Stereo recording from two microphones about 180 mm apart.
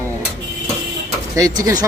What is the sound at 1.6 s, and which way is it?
Speech, 20° right (ahead or behind).